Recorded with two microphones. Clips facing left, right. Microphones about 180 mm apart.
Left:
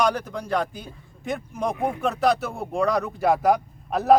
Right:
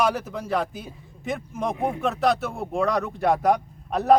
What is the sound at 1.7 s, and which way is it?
Speech, 20° right (ahead or behind).